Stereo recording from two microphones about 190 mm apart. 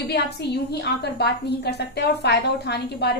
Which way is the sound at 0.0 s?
60° left (ahead or behind).